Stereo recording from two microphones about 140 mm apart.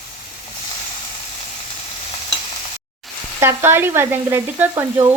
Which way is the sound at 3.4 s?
15° right (ahead or behind).